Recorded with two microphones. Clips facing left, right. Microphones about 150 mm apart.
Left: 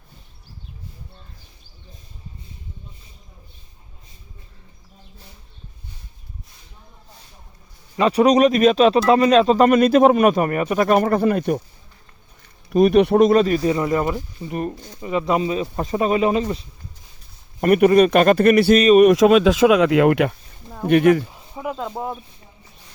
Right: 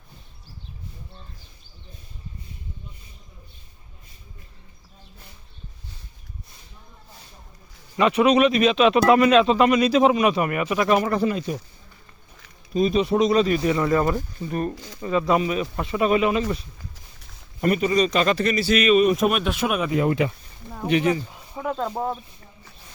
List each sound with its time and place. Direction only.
7.9 s a man's voice: 35° left (ahead or behind); by 11.5 s 55° left (ahead or behind)
12.7 s a man's voice: 65° left (ahead or behind); by 13.6 s 45° left (ahead or behind)
13.7 s speech: 25° left (ahead or behind)
17.6 s a man's voice: 65° left (ahead or behind)
18.9 s speech: 80° left
20.8 s a man's voice: 55° left (ahead or behind)
21.5 s speech: 10° left (ahead or behind)